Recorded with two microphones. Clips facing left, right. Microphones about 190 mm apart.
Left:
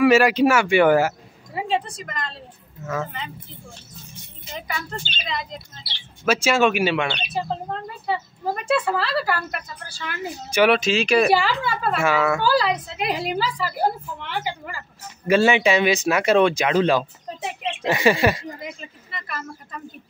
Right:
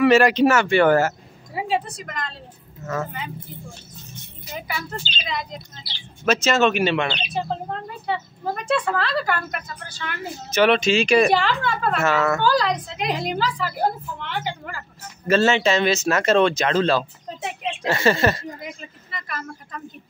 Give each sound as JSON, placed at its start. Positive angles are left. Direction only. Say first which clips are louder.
{"t": 0.0, "sound": "speech", "louder": "even", "side_deg": 5}
{"t": 1.5, "sound": "speech", "louder": "even", "side_deg": 0}
{"t": 4.6, "sound": "speech", "louder": "right 1 dB", "side_deg": -5}
{"t": 18.6, "sound": "speech", "louder": "left 1 dB", "side_deg": 0}